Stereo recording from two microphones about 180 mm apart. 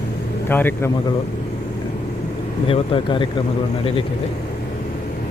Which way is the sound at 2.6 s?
30° left (ahead or behind).